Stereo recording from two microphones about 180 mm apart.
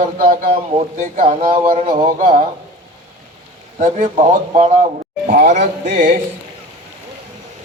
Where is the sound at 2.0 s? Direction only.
45° right (ahead or behind).